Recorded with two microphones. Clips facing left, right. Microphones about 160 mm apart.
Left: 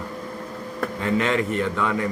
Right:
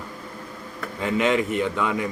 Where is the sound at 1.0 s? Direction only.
15° right (ahead or behind).